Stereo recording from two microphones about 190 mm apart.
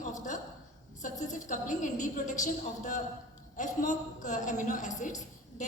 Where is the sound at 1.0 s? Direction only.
40° left (ahead or behind).